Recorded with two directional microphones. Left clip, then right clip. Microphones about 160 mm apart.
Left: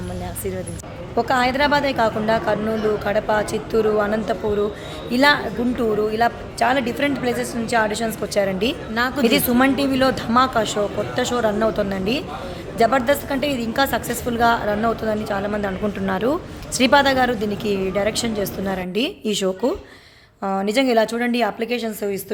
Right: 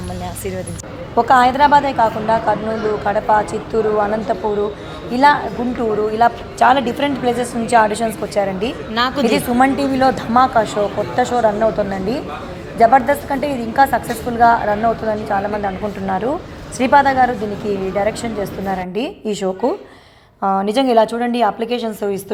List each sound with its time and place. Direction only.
1.1 s a woman's voice: 10° left (ahead or behind)
8.4 s a woman's voice: 30° left (ahead or behind)
9.0 s a woman's voice: 15° left (ahead or behind)
20.4 s a woman's voice: 10° left (ahead or behind)